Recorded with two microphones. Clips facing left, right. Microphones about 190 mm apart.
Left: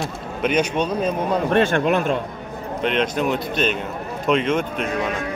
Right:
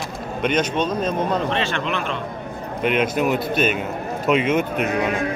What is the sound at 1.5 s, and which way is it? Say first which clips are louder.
Speech: left 6 dB; 50° left (ahead or behind).